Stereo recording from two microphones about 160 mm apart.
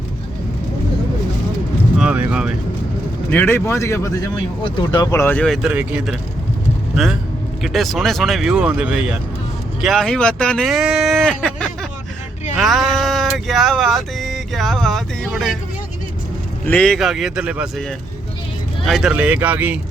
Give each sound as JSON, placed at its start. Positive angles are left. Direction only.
{"t": 2.0, "sound": "vehicle", "side_deg": -5}
{"t": 3.2, "sound": "speech", "side_deg": 10}
{"t": 4.6, "sound": "speech", "side_deg": 30}
{"t": 5.1, "sound": "speech", "side_deg": 10}
{"t": 5.6, "sound": "speech", "side_deg": -10}
{"t": 12.5, "sound": "a sound", "side_deg": 0}
{"t": 16.6, "sound": "speech", "side_deg": 5}